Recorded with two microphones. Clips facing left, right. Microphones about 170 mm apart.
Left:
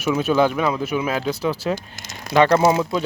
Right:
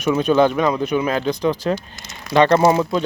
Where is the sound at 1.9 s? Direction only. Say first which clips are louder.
Left 1 dB; 45° left (ahead or behind).